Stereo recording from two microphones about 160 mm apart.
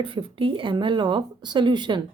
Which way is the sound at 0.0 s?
35° right (ahead or behind).